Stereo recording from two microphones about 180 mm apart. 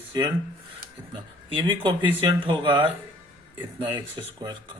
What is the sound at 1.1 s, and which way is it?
Speech, 25° right (ahead or behind).